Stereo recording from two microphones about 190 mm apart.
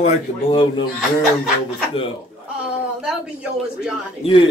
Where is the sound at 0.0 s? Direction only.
25° left (ahead or behind).